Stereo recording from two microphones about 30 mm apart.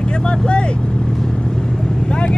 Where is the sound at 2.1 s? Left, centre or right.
Left.